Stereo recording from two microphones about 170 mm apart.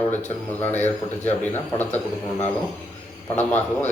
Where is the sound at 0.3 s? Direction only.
10° left (ahead or behind).